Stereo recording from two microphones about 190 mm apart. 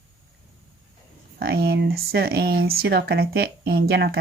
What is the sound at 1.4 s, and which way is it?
Speech, 55° right (ahead or behind).